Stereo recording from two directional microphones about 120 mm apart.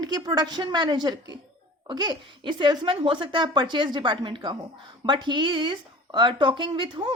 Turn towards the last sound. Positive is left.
turn(degrees=-40)  # may be behind; listen again after turning